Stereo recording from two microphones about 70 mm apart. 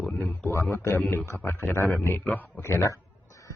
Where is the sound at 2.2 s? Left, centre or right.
Left.